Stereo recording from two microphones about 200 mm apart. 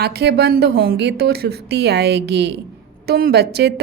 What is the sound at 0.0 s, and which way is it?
Speech, 55° right (ahead or behind).